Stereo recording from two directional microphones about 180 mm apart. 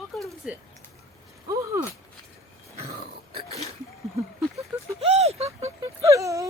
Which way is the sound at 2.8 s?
35° right (ahead or behind).